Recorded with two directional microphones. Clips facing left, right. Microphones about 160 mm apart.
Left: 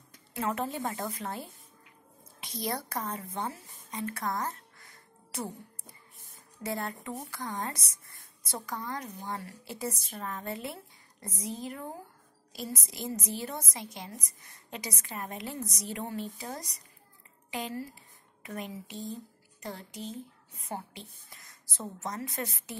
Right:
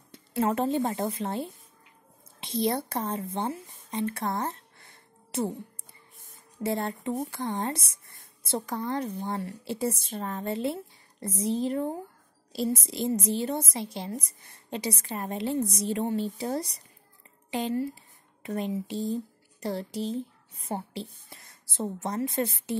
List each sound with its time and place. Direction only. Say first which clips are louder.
0.1 s a woman's voice: right 6 dB; 30° right (ahead or behind)